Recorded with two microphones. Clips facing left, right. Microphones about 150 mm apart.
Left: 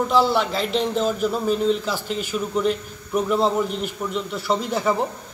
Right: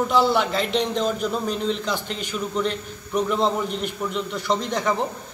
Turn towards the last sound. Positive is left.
turn(degrees=5)  # may be behind; listen again after turning